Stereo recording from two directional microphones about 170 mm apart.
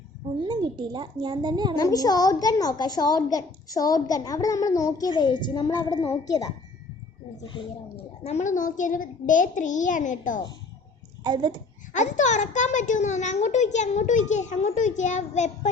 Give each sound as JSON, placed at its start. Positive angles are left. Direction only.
{"t": 0.4, "sound": "a child's voice", "side_deg": -25}
{"t": 1.7, "sound": "a child's voice", "side_deg": 20}
{"t": 11.2, "sound": "a child's voice", "side_deg": -25}
{"t": 11.9, "sound": "a child's voice", "side_deg": 45}